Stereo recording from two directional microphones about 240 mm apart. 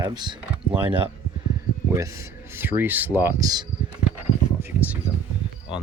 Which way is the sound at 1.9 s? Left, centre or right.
Centre.